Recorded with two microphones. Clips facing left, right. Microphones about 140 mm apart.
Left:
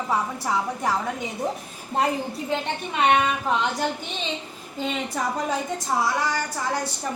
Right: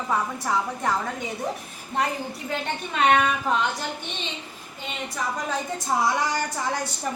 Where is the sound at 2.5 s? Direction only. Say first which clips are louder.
Left 1 dB; 15° left (ahead or behind).